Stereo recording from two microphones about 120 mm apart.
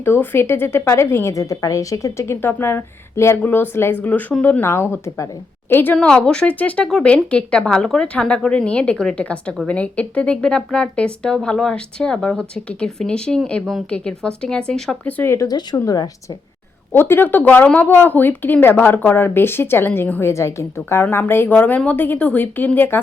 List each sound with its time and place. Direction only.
0.0 s a woman's voice: 20° left (ahead or behind)
15.4 s speech: 30° left (ahead or behind)
16.9 s speech: 20° left (ahead or behind)